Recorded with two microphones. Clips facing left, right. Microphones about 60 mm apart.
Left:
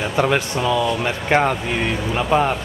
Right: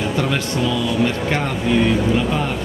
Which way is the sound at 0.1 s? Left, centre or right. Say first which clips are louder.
Left 2 dB; left.